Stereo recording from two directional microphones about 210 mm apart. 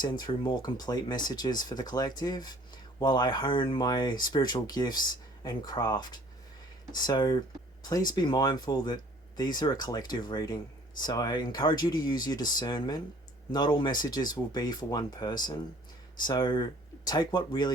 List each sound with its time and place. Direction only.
0.1 s speech: 20° left (ahead or behind)